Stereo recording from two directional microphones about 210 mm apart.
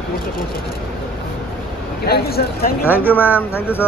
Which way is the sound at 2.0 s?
50° left (ahead or behind).